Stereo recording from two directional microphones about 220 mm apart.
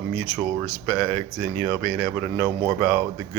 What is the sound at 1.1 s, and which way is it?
Speech, 15° left (ahead or behind).